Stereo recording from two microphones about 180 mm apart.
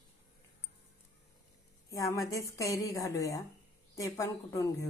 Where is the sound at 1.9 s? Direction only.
15° left (ahead or behind).